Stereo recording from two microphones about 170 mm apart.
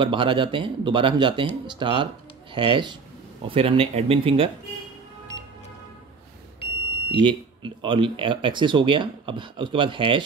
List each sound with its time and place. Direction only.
0.0 s speech: 30° right (ahead or behind)
7.1 s speech: 30° right (ahead or behind)